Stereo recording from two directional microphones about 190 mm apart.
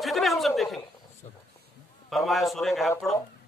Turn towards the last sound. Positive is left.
turn(degrees=0)  # may be behind; listen again after turning